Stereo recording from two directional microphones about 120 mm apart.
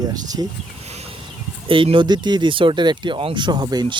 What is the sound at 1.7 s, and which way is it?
Speech, 45° right (ahead or behind).